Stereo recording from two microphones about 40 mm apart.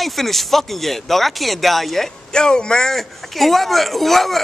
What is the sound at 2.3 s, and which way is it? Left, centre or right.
Speech, centre.